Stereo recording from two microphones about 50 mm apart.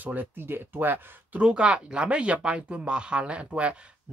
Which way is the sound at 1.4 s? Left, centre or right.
Right.